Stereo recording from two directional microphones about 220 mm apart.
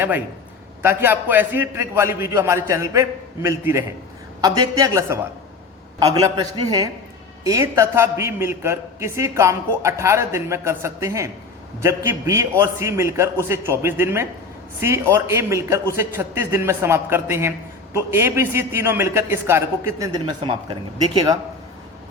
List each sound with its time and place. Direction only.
0.8 s a man's voice: 10° right (ahead or behind)